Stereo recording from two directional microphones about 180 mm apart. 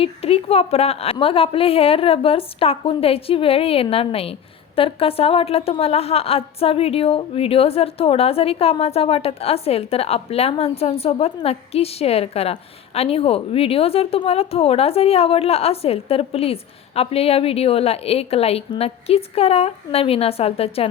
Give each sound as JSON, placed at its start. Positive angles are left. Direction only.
{"t": 0.0, "sound": "a woman's voice", "side_deg": 35}